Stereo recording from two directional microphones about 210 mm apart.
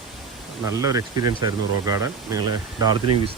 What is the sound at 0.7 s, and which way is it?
Speech, 15° right (ahead or behind).